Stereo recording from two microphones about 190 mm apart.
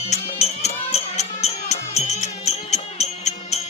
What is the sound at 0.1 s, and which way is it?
Music, 35° left (ahead or behind).